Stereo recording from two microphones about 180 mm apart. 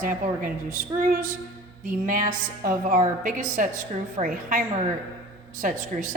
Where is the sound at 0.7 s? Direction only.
50° right (ahead or behind).